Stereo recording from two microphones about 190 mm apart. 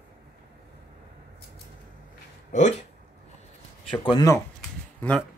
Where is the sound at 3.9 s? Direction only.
20° left (ahead or behind).